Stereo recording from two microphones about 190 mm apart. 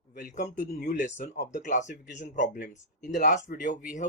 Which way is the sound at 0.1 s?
50° left (ahead or behind).